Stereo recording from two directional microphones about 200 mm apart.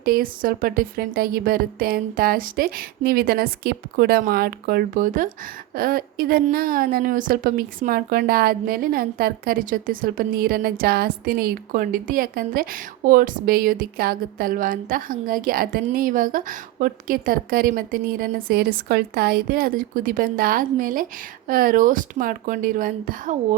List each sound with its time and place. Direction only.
0.0 s a woman's voice: 45° right (ahead or behind)